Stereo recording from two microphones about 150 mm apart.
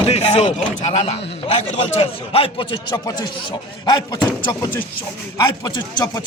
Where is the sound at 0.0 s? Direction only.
45° left (ahead or behind).